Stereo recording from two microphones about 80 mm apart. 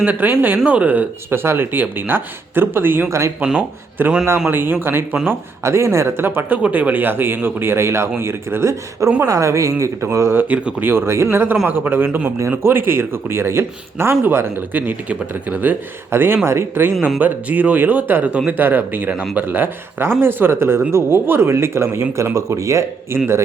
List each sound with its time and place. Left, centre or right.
0.0 s speech: right
10.5 s speech: right
16.1 s speech: right
19.1 s speech: centre
19.4 s speech: right